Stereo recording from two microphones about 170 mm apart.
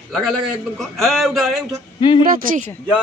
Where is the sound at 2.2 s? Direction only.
55° right (ahead or behind).